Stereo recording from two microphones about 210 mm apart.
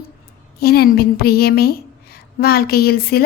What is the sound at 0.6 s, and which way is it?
A woman's voice, 50° left (ahead or behind).